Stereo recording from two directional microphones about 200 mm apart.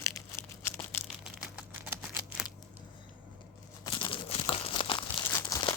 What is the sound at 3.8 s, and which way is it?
Crumpling, 25° left (ahead or behind).